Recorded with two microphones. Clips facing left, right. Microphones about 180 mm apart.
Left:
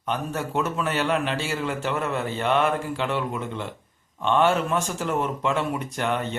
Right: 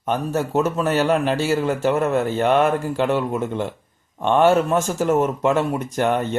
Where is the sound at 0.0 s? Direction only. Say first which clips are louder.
Right 6 dB; 45° right (ahead or behind).